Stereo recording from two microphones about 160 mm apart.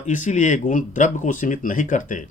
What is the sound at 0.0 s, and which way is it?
A man's voice, 50° left (ahead or behind).